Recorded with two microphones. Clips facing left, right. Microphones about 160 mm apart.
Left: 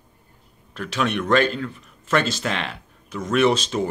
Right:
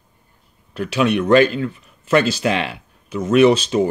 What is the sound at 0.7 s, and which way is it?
A man's voice, 10° right (ahead or behind).